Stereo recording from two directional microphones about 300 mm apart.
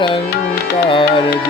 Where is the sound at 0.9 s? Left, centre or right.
Centre.